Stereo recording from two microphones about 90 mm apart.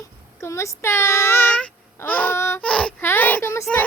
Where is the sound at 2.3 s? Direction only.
30° left (ahead or behind).